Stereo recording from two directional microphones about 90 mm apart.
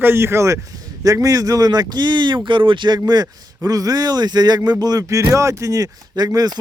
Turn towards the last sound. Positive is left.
turn(degrees=-45)  # may be behind; listen again after turning